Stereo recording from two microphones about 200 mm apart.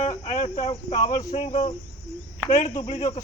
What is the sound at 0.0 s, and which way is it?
Cricket, 35° left (ahead or behind).